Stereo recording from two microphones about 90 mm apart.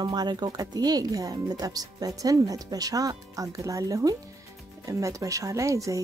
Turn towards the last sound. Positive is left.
turn(degrees=-35)  # may be behind; listen again after turning